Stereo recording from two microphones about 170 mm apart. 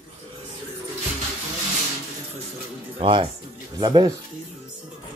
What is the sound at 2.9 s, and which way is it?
A man's voice, 30° right (ahead or behind).